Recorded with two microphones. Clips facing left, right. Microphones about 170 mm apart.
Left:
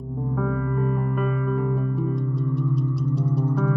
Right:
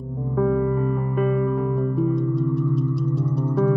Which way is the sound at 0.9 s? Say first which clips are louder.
Right 4 dB; centre (ahead or behind).